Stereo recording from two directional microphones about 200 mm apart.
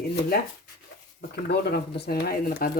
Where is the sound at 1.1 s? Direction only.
50° left (ahead or behind).